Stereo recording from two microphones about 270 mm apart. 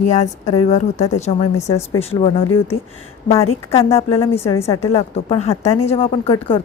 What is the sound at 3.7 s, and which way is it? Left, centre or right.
Speech, left.